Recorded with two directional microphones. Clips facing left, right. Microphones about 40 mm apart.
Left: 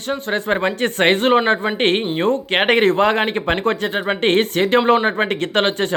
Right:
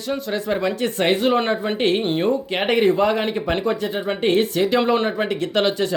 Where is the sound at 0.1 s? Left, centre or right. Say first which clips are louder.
Left 3 dB; left.